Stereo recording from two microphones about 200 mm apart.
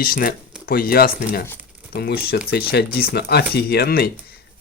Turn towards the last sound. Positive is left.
turn(degrees=50)  # may be behind; listen again after turning